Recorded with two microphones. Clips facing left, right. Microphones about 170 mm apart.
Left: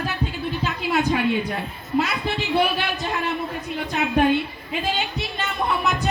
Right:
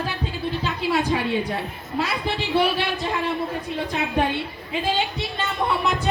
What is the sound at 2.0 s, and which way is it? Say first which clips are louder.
A woman's voice: left 2 dB; 30° right (ahead or behind).